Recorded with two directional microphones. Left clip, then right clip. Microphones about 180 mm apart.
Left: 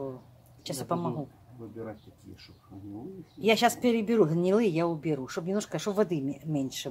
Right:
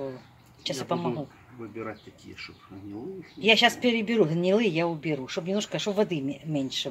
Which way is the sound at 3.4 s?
15° left (ahead or behind).